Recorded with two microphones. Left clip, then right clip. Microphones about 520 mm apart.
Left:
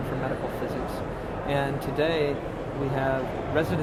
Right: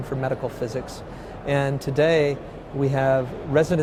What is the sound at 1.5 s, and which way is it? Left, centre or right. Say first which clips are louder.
Speech: right 4 dB; right.